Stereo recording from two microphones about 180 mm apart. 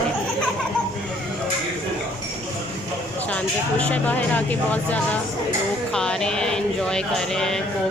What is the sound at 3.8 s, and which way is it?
Speech, 10° left (ahead or behind).